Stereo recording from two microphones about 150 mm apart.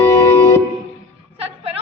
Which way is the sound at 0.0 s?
20° left (ahead or behind).